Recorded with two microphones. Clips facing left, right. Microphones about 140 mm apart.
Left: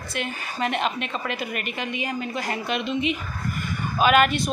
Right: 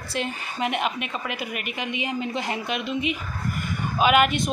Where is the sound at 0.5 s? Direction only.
10° right (ahead or behind).